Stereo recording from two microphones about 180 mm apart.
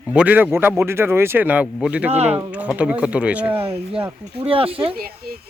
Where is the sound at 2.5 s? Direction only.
5° right (ahead or behind).